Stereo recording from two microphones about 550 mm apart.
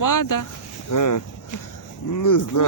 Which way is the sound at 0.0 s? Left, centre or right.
Left.